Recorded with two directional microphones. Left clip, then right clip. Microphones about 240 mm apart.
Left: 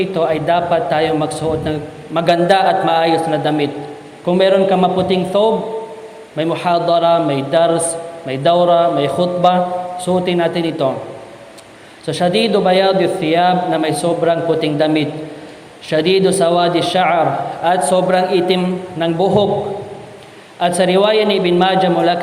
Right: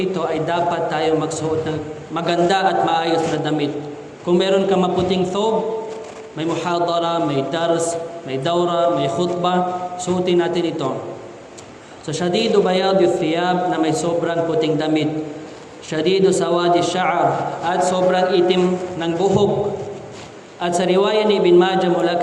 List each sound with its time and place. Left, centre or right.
0.0 s a man's voice: left
12.0 s a man's voice: left
20.6 s a man's voice: left